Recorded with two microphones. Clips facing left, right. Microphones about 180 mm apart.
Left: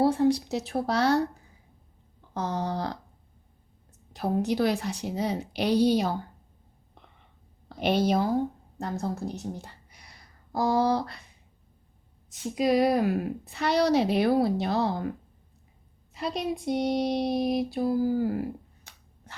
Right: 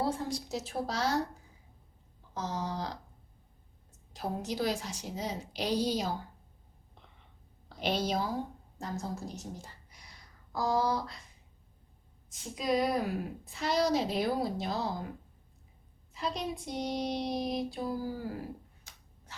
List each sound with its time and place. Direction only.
0.0 s child singing: 65° left (ahead or behind)
2.3 s child singing: 60° left (ahead or behind)
4.1 s child singing: 65° left (ahead or behind)
7.8 s child singing: 60° left (ahead or behind)
12.3 s a woman's voice: 70° left (ahead or behind)
16.1 s child singing: 70° left (ahead or behind)
18.9 s a sound: 60° left (ahead or behind)